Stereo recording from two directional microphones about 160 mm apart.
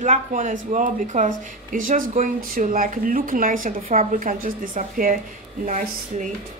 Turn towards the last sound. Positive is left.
turn(degrees=-50)  # may be behind; listen again after turning